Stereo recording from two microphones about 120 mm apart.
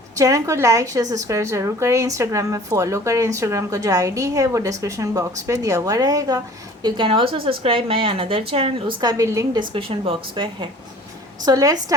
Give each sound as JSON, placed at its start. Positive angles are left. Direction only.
{"t": 0.2, "sound": "a woman's voice", "side_deg": -25}
{"t": 9.0, "sound": "a woman's voice", "side_deg": -30}
{"t": 9.6, "sound": "a woman's voice", "side_deg": -50}
{"t": 11.4, "sound": "a woman's voice", "side_deg": -30}